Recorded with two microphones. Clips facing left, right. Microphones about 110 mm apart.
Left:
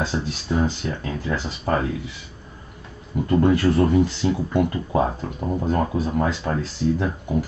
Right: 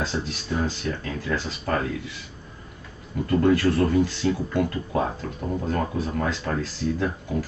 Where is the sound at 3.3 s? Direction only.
20° left (ahead or behind).